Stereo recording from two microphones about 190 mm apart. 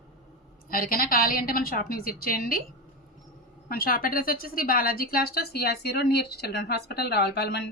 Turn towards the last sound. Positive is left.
turn(degrees=60)  # may be behind; listen again after turning